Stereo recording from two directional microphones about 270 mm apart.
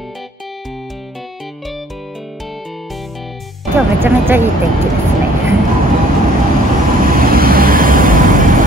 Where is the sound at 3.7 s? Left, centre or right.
Centre.